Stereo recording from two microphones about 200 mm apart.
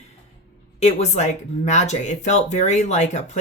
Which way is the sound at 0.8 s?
35° left (ahead or behind).